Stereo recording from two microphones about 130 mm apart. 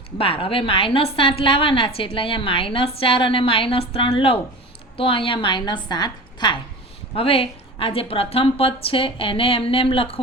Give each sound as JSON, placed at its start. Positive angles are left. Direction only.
{"t": 0.2, "sound": "a woman's voice", "side_deg": 45}
{"t": 7.2, "sound": "a woman's voice", "side_deg": 45}